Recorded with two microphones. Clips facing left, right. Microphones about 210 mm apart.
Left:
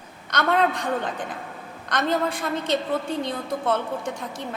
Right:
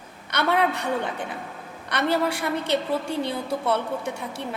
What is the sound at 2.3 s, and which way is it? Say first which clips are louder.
Speech: right 1 dB; 70° right (ahead or behind).